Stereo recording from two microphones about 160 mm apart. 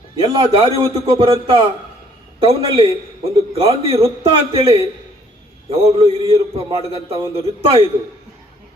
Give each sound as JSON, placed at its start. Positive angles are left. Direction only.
{"t": 0.2, "sound": "a man's voice", "side_deg": -30}